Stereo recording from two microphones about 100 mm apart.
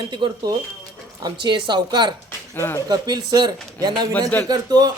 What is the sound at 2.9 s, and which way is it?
Speech, 45° right (ahead or behind).